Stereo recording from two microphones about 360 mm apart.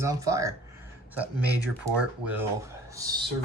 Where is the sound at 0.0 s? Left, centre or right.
Centre.